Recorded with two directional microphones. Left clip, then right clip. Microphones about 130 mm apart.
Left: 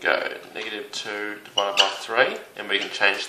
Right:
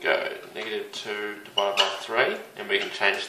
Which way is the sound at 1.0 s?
45° left (ahead or behind).